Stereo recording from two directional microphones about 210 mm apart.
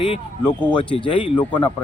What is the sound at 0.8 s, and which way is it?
Speech, 25° left (ahead or behind).